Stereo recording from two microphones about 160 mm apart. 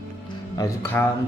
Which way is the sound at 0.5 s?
20° left (ahead or behind).